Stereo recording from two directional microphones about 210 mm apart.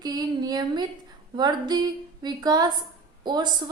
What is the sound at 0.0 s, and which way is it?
A woman's voice, 20° right (ahead or behind).